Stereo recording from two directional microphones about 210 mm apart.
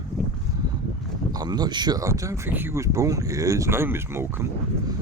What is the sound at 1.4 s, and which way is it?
Speech, 20° right (ahead or behind).